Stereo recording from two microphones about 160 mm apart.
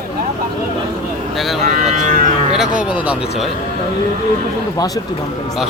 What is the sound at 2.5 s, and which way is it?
Speech, 5° right (ahead or behind).